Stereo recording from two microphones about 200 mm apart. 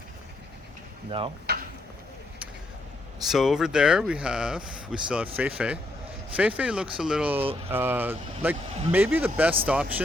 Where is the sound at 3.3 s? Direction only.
Centre (ahead or behind).